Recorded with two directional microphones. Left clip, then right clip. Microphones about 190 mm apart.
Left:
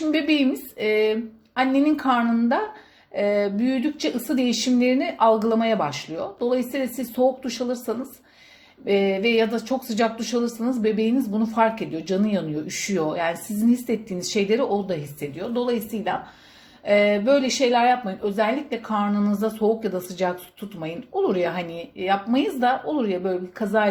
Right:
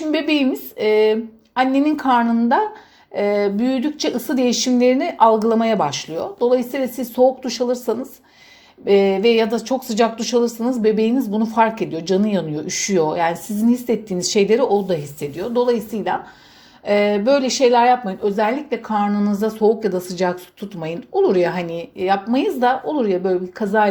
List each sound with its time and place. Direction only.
0.1 s speech: 25° right (ahead or behind)